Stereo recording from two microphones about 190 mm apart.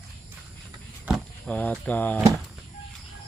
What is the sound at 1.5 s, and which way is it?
Speech, 10° left (ahead or behind).